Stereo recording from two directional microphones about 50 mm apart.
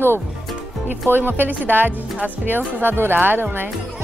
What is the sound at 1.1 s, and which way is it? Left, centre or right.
Speech, right.